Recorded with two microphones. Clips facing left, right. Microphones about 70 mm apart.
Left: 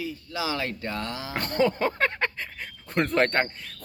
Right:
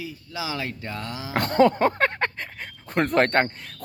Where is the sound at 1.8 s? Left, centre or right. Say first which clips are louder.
Right 4 dB; right.